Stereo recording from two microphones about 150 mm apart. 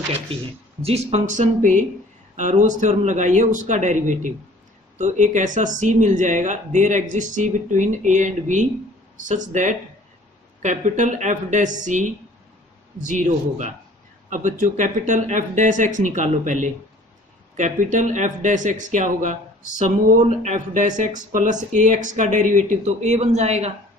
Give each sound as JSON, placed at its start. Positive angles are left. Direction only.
{"t": 0.8, "sound": "speech", "side_deg": -40}